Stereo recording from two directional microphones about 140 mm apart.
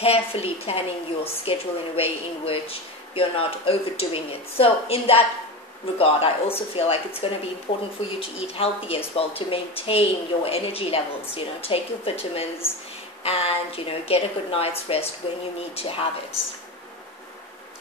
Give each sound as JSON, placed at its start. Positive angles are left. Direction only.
{"t": 0.0, "sound": "a woman's voice", "side_deg": 45}